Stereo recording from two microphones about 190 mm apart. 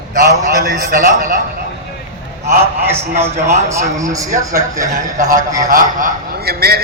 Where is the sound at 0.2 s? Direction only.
55° right (ahead or behind).